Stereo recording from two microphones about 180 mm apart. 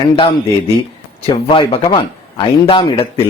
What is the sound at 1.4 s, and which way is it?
Speech, 30° left (ahead or behind).